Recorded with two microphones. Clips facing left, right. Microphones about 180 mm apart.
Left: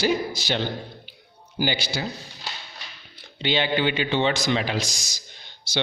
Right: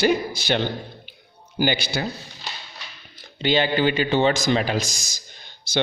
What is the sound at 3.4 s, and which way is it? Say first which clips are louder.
A man's voice: right 3 dB; 45° right (ahead or behind).